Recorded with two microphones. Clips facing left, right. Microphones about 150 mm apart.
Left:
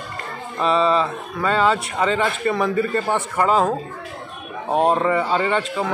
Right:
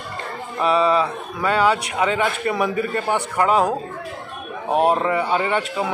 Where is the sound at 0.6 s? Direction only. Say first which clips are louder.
Even; 5° right (ahead or behind).